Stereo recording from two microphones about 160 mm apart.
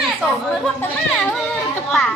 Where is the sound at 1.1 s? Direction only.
Centre (ahead or behind).